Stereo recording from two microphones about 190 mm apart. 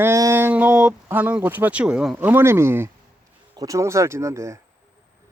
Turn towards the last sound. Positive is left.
turn(degrees=-15)  # may be behind; listen again after turning